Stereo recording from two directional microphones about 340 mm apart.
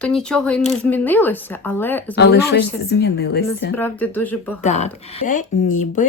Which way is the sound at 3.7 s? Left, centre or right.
Centre.